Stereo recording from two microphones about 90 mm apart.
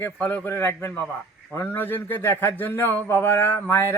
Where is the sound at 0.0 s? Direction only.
20° left (ahead or behind).